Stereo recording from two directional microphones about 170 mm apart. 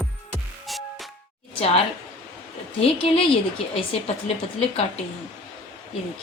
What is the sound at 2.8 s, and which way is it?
Speech, 35° left (ahead or behind).